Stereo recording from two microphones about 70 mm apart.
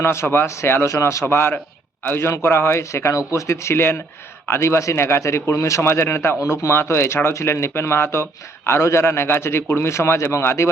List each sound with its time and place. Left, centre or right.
0.0 s speech: left